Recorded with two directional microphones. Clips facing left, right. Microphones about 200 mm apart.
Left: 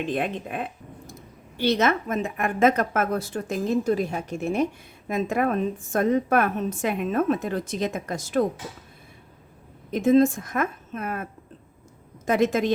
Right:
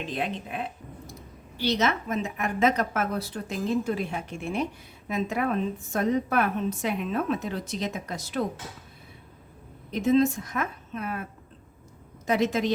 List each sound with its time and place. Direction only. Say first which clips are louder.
0.1 s a woman's voice: left 4 dB; 55° left (ahead or behind)
9.9 s a woman's voice: left 4 dB; 50° left (ahead or behind)